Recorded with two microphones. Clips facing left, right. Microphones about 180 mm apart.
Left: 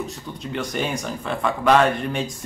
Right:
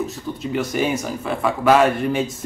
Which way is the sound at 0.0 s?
5° right (ahead or behind).